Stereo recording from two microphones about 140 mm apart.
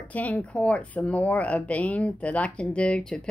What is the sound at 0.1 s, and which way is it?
Speech, 10° left (ahead or behind).